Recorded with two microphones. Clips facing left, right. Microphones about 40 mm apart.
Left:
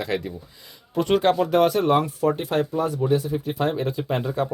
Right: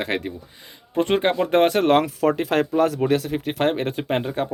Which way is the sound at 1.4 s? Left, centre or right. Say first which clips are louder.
Right 2 dB; right.